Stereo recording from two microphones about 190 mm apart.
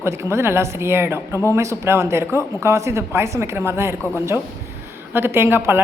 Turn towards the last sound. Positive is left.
turn(degrees=-10)  # may be behind; listen again after turning